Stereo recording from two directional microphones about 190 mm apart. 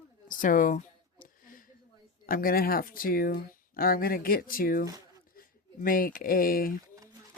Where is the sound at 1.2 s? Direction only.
45° left (ahead or behind).